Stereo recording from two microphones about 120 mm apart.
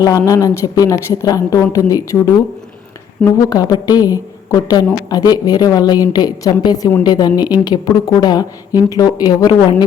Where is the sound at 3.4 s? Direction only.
30° left (ahead or behind).